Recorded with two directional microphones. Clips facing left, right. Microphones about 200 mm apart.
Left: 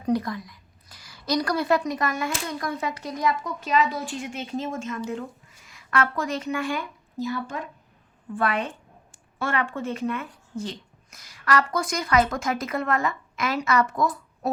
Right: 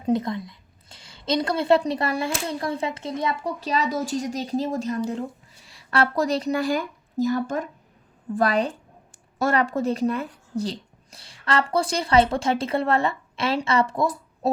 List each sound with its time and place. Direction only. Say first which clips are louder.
0.0 s a woman's voice: right 2 dB; 25° right (ahead or behind)